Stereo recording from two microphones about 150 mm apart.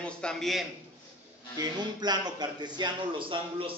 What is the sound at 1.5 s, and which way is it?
A man's voice, 25° right (ahead or behind).